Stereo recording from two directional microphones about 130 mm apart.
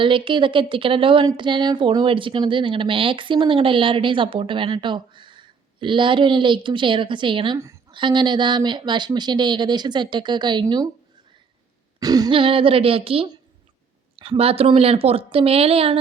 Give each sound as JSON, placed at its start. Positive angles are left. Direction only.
{"t": 0.0, "sound": "speech", "side_deg": -40}
{"t": 11.9, "sound": "a sound", "side_deg": -30}
{"t": 12.3, "sound": "speech", "side_deg": -45}